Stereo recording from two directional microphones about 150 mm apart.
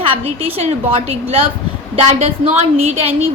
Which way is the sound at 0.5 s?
45° right (ahead or behind).